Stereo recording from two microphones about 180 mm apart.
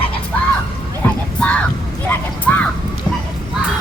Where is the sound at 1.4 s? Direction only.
5° left (ahead or behind).